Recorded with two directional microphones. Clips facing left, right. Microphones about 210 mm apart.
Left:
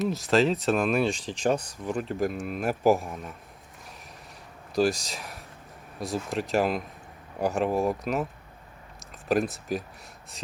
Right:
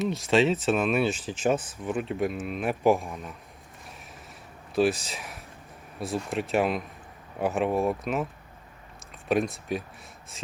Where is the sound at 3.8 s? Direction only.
Centre (ahead or behind).